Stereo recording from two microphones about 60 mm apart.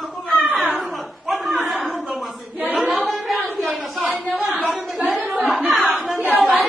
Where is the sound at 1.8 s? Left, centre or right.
Left.